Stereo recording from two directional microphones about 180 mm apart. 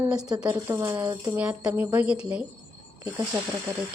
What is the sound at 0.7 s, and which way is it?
Speech, 20° right (ahead or behind).